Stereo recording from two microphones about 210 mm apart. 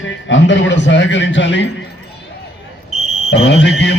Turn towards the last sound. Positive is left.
turn(degrees=60)  # may be behind; listen again after turning